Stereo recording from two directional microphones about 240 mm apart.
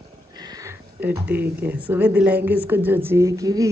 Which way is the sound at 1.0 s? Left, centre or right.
Centre.